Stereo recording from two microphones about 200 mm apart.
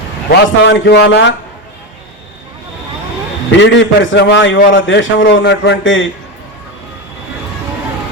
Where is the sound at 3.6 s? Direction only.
65° left (ahead or behind).